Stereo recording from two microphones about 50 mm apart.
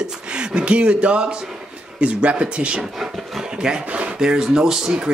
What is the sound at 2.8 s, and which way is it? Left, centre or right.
Speech, centre.